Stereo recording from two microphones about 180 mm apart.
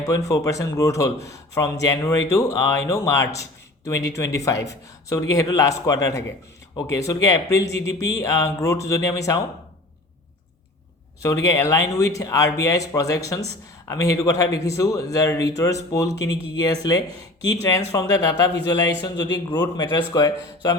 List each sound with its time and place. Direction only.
0.0 s a man's voice: 20° left (ahead or behind)
11.2 s a man's voice: 20° left (ahead or behind)